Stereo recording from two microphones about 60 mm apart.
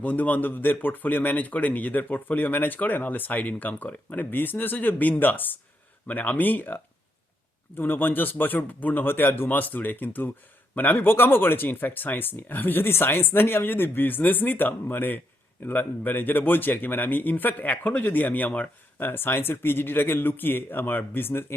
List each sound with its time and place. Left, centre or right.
0.0 s speech: left